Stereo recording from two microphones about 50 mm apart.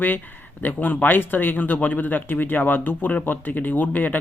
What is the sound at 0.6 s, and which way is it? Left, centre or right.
Speech, left.